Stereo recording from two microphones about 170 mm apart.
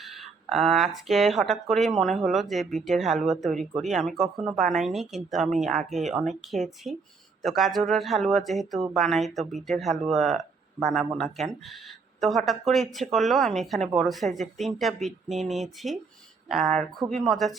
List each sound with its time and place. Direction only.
0.0 s speech: centre (ahead or behind)
12.2 s speech: centre (ahead or behind)